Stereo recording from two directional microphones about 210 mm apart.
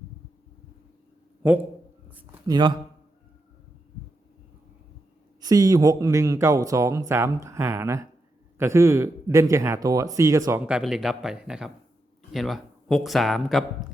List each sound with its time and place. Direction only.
1.4 s speech: 10° right (ahead or behind)
2.5 s a man's voice: 20° right (ahead or behind)
5.4 s speech: 15° right (ahead or behind)
10.7 s speech: 5° right (ahead or behind)